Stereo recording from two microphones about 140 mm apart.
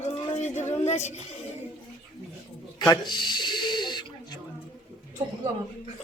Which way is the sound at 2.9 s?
30° left (ahead or behind).